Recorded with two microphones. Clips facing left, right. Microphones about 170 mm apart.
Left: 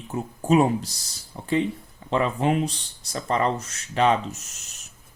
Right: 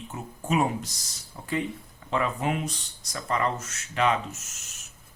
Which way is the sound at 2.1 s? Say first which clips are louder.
Left 5 dB; 30° left (ahead or behind).